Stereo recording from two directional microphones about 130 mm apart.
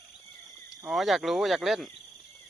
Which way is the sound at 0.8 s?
Centre (ahead or behind).